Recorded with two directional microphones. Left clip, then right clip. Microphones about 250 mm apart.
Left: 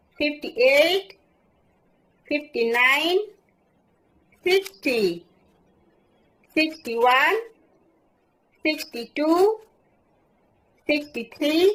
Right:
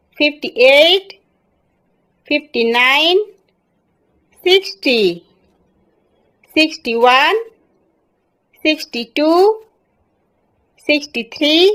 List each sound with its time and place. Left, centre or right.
0.2 s a woman's voice: right
2.2 s a woman's voice: right
4.4 s a woman's voice: right
6.5 s a woman's voice: right
8.6 s a woman's voice: right
10.8 s a woman's voice: right